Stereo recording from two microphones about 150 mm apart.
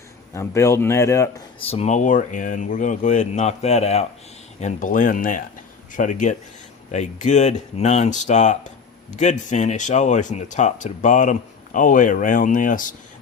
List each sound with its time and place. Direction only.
0.3 s speech: 20° left (ahead or behind)
1.5 s speech: 40° left (ahead or behind)
4.6 s speech: 60° left (ahead or behind)